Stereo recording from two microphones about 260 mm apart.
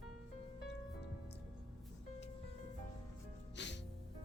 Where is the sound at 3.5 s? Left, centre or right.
Left.